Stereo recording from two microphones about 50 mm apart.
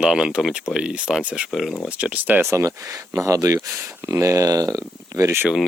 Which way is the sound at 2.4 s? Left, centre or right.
Right.